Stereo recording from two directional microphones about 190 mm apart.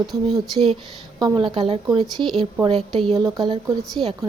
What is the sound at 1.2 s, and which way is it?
Speech, 20° right (ahead or behind).